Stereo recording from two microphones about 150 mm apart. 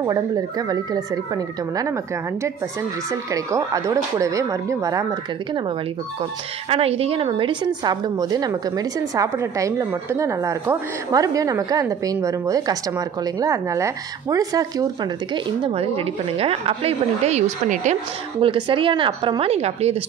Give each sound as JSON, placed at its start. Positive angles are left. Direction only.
{"t": 0.0, "sound": "a woman's voice", "side_deg": -25}
{"t": 3.5, "sound": "a woman's voice", "side_deg": -20}
{"t": 6.7, "sound": "a woman's voice", "side_deg": -40}
{"t": 15.3, "sound": "a woman's voice", "side_deg": -35}
{"t": 18.4, "sound": "a woman's voice", "side_deg": -35}